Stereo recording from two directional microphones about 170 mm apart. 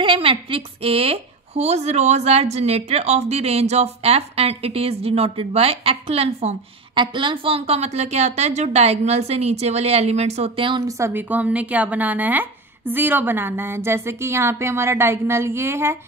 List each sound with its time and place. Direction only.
0.0 s a woman's voice: 30° right (ahead or behind)
11.0 s a woman's voice: 15° right (ahead or behind)